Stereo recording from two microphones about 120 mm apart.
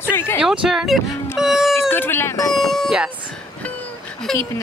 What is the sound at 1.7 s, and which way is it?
Speech, 20° left (ahead or behind).